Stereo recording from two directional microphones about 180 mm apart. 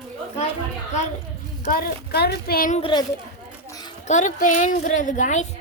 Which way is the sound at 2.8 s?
25° left (ahead or behind).